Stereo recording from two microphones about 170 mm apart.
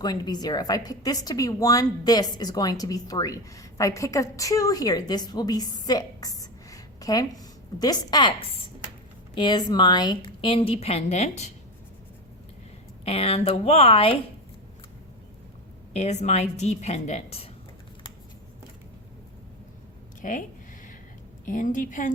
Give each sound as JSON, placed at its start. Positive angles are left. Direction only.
{"t": 0.0, "sound": "a woman's voice", "side_deg": 25}
{"t": 13.1, "sound": "a woman's voice", "side_deg": 35}
{"t": 15.9, "sound": "a woman's voice", "side_deg": 40}
{"t": 20.2, "sound": "a woman's voice", "side_deg": 50}
{"t": 21.4, "sound": "a woman's voice", "side_deg": 50}